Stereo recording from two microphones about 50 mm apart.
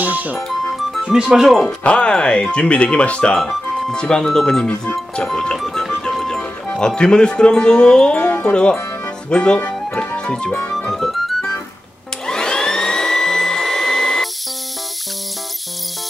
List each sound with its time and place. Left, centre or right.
0.0 s music: right
0.5 s music: centre
1.3 s speech: centre
1.8 s speech: left
3.3 s speech: centre
3.9 s music: centre
5.6 s music: centre
8.2 s speech: left
8.5 s music: centre
9.3 s speech: left
9.9 s music: centre
10.7 s music: centre
12.3 s vacuum cleaner: centre